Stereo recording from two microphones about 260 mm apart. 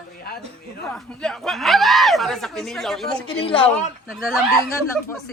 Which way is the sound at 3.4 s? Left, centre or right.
Left.